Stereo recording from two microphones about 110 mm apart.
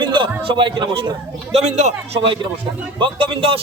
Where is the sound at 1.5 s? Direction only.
85° right.